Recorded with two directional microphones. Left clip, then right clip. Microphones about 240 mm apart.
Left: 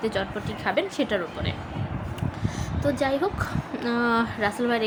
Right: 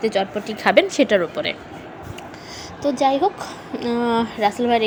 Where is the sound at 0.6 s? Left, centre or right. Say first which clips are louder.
Right 10 dB; right.